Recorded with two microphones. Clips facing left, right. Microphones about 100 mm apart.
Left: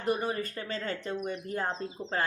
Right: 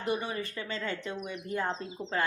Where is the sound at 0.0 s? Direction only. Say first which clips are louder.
Left 2 dB; 45° left (ahead or behind).